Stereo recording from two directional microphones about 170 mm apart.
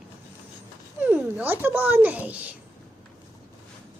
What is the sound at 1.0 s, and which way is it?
Child singing, 10° right (ahead or behind).